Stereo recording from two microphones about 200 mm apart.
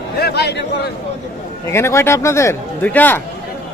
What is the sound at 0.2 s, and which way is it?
Speech, 55° left (ahead or behind).